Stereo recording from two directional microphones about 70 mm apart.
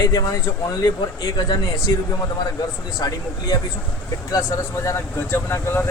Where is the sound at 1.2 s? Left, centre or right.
Left.